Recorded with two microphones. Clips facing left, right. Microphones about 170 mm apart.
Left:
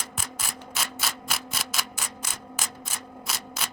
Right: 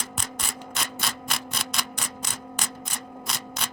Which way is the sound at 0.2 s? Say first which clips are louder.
Even; 5° left (ahead or behind).